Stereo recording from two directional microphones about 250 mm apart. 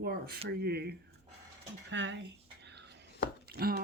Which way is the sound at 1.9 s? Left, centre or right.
Right.